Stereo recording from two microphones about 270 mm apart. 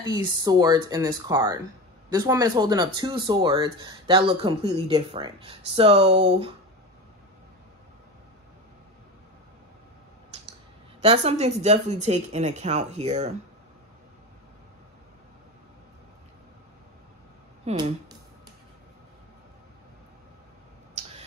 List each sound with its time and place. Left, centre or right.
0.0 s speech: centre
10.3 s tick: right
11.0 s a woman's voice: right
17.6 s a woman's voice: right
21.0 s a sound: right